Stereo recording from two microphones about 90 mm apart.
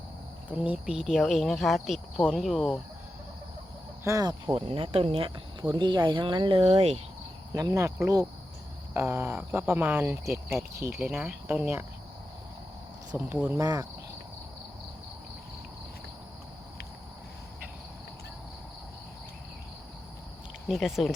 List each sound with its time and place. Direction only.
0.5 s speech: 15° right (ahead or behind)
4.0 s speech: 35° right (ahead or behind)
4.5 s speech: 90° right
5.6 s speech: 55° right (ahead or behind); by 7.0 s 90° right
7.5 s speech: 35° right (ahead or behind)
8.9 s speech: 25° right (ahead or behind)
10.9 s speech: 15° right (ahead or behind)
13.1 s speech: 20° right (ahead or behind)
13.6 s speech: 40° right (ahead or behind)
20.7 s speech: centre (ahead or behind)